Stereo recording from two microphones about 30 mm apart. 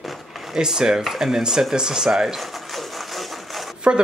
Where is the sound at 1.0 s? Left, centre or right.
Centre.